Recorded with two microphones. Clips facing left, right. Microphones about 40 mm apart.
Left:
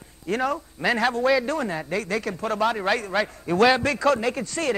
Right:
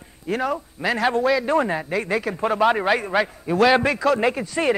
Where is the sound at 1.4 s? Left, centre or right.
Right.